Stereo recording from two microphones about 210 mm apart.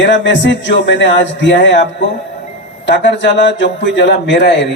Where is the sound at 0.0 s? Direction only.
55° left (ahead or behind).